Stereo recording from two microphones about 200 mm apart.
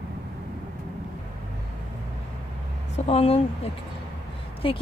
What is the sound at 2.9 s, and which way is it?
Speech, 30° left (ahead or behind).